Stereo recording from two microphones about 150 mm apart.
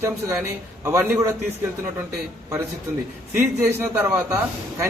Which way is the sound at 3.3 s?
15° right (ahead or behind).